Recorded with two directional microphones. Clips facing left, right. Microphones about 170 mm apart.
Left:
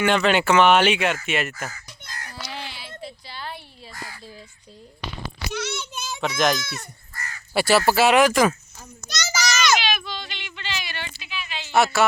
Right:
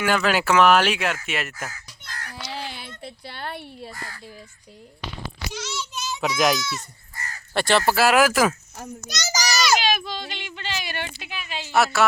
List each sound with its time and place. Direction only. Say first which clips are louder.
0.0 s speech: left 2 dB; 5° right (ahead or behind)
2.5 s a sound: right 3 dB; 40° right (ahead or behind)
2.7 s a sound: left 1 dB; 55° right (ahead or behind)
5.5 s a child's voice: left 4 dB; 60° left (ahead or behind)
6.1 s speech: right 1 dB; 5° right (ahead or behind)
6.6 s speech: right 3 dB; 55° left (ahead or behind)
7.1 s crow: even; 20° right (ahead or behind)
7.5 s speech: left 2 dB; 5° left (ahead or behind)
9.0 s children playing: left 1 dB; 40° right (ahead or behind)
9.8 s a sound: right 3 dB; 40° right (ahead or behind)
11.7 s speech: left 1 dB; centre (ahead or behind)